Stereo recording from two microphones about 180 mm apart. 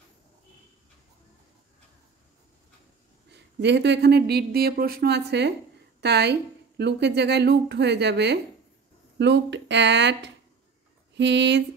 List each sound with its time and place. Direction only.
3.3 s a woman's voice: 70° right (ahead or behind)